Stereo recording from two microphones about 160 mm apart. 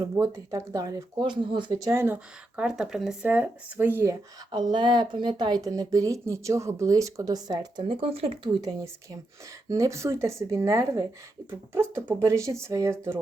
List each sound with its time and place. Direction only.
0.0 s speech: 20° right (ahead or behind)
4.7 s speech: 30° right (ahead or behind)
8.6 s speech: 20° right (ahead or behind)